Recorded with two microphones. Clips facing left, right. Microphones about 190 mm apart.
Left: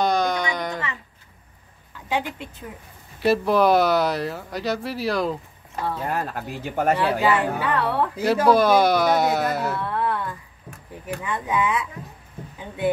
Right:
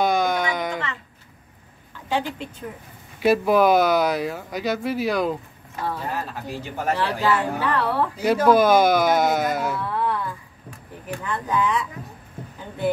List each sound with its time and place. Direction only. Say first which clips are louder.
0.0 s a sound: right 1 dB; 5° right (ahead or behind)
2.0 s speech: right 1 dB; 5° left (ahead or behind)
6.0 s speech: left 2 dB; 55° left (ahead or behind)
7.0 s speech: left 2 dB; 5° left (ahead or behind)
12.5 s rowboat: left 1 dB; centre (ahead or behind)